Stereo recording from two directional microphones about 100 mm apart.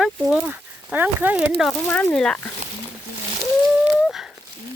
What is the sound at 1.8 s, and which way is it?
Speech, 20° left (ahead or behind).